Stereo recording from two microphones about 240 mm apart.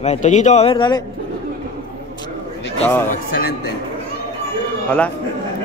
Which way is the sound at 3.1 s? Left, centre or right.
Left.